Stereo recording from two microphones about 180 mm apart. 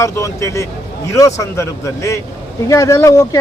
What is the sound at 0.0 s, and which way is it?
Speech, 15° left (ahead or behind).